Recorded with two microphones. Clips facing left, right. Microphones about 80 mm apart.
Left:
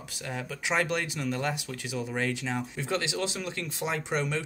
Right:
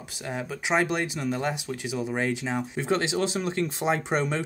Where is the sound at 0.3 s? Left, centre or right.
Right.